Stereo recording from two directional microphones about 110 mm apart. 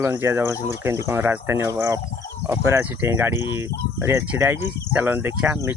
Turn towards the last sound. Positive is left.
turn(degrees=-15)  # may be behind; listen again after turning